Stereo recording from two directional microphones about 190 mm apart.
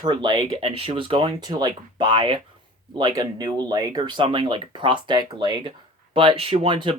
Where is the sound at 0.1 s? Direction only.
25° right (ahead or behind).